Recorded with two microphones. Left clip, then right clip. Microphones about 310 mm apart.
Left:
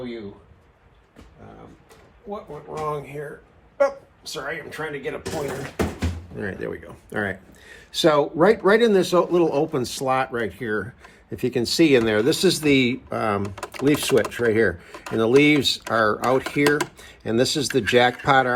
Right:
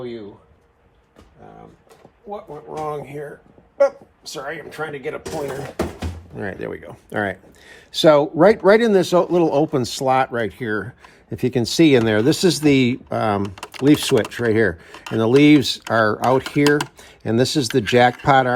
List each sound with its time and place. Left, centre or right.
2.7 s speech: right
6.3 s speech: right